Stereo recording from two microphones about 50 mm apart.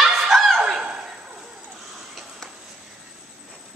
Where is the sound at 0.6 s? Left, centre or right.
Centre.